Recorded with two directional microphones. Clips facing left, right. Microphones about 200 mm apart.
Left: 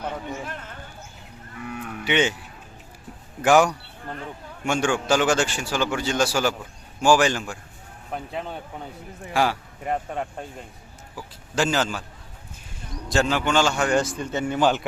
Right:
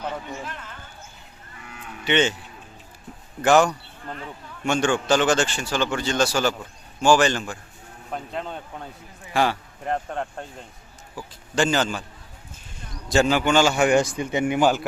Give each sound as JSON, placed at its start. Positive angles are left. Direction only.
{"t": 0.4, "sound": "speech", "side_deg": 50}
{"t": 2.0, "sound": "speech", "side_deg": 10}
{"t": 3.4, "sound": "speech", "side_deg": 10}
{"t": 11.5, "sound": "a man's voice", "side_deg": 5}
{"t": 13.1, "sound": "a man's voice", "side_deg": 0}